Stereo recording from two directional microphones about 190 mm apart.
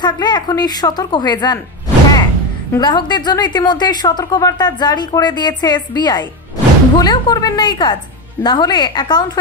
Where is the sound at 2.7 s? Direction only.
20° left (ahead or behind).